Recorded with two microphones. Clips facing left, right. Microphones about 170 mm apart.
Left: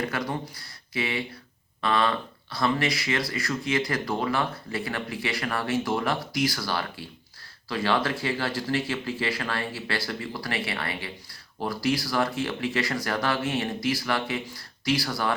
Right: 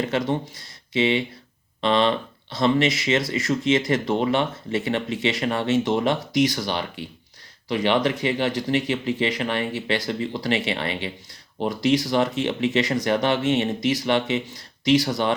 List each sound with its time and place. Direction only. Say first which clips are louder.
0.0 s speech: right 6 dB; 25° right (ahead or behind)